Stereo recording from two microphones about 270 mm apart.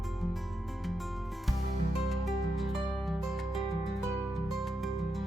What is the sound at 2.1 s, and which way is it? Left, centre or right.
Music, centre.